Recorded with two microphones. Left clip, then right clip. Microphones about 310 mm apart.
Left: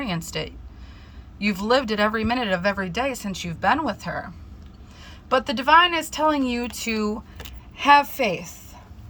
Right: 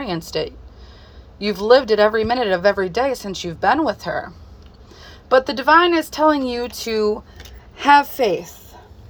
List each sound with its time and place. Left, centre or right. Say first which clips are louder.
0.0 s speech: right 5 dB; centre
7.8 s a woman's voice: right 3 dB; centre